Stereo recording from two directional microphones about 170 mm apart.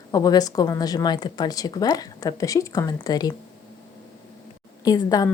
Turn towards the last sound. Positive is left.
turn(degrees=20)  # may be behind; listen again after turning